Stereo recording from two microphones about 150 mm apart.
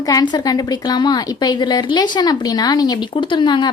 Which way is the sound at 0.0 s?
25° left (ahead or behind).